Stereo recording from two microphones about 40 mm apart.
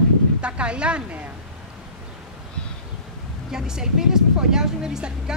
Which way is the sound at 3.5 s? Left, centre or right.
Centre.